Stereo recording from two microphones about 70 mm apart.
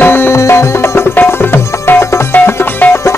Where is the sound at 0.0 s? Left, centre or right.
Left.